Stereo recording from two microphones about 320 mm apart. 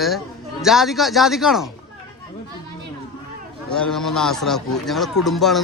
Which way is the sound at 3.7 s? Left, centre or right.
Centre.